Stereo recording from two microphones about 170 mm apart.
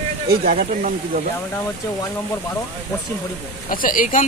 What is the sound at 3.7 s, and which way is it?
Speech, 55° left (ahead or behind).